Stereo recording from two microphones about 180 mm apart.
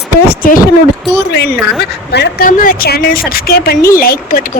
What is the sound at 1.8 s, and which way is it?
Speech, 65° left (ahead or behind).